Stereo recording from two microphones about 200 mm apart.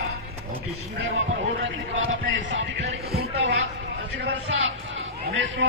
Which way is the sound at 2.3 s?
70° right (ahead or behind).